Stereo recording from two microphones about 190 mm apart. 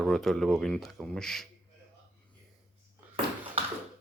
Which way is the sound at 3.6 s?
30° right (ahead or behind).